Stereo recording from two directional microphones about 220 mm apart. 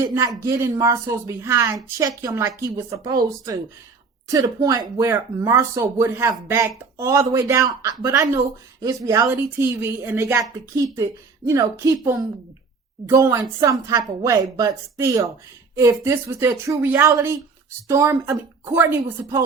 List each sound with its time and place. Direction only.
0.0 s speech: 15° right (ahead or behind)